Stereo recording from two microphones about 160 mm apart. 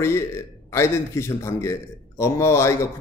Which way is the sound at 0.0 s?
15° left (ahead or behind).